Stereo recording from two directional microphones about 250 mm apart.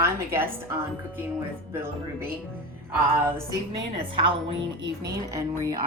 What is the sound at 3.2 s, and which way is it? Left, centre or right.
Speech, right.